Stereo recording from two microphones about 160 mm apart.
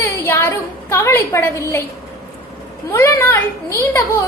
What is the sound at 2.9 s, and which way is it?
Speech, 15° left (ahead or behind).